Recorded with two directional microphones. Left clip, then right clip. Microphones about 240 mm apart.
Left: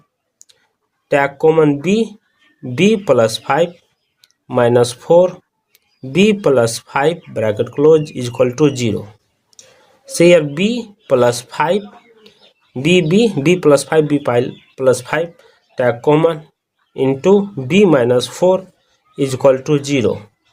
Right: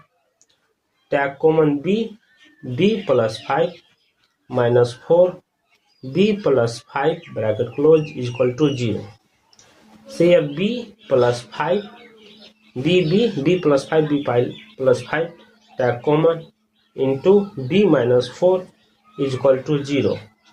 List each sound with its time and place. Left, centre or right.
1.0 s speech: left
10.2 s speech: left
12.8 s speech: left